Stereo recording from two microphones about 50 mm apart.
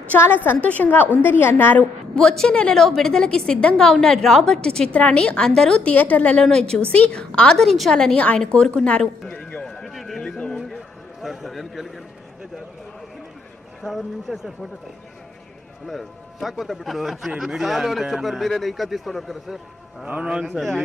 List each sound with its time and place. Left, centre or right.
0.4 s a woman's voice: left
2.1 s a woman's voice: centre
5.9 s a woman's voice: left
6.4 s a woman's voice: centre
7.6 s a man's voice: centre
7.9 s a woman's voice: centre
9.0 s a woman's voice: centre
9.6 s run: centre
11.2 s a sound: centre
13.8 s a man's voice: centre
15.9 s a man's voice: centre
20.1 s a man's voice: right